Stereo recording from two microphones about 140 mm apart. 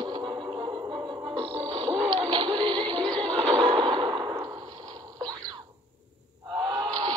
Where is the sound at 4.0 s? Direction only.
30° right (ahead or behind).